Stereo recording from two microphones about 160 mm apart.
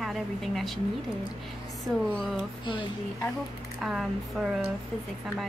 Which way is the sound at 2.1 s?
5° left (ahead or behind).